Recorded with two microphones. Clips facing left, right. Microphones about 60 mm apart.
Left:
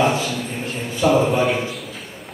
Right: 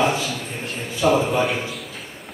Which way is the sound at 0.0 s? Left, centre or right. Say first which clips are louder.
Left 2 dB; centre.